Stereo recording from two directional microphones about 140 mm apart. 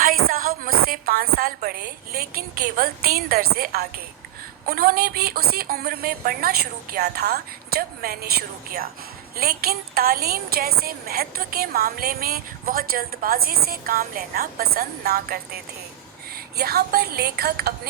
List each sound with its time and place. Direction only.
0.0 s a woman's voice: 80° right
16.6 s a woman's voice: 90° right